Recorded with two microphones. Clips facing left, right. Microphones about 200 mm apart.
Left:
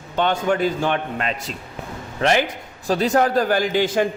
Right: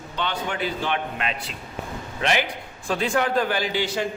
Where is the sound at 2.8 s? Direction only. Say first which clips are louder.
Left 5 dB; 40° left (ahead or behind).